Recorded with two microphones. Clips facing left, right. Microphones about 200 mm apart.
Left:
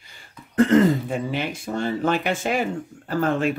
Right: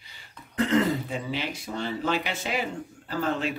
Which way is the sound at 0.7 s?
50° left (ahead or behind).